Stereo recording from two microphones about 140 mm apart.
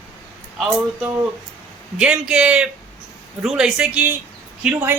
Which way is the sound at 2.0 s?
5° right (ahead or behind).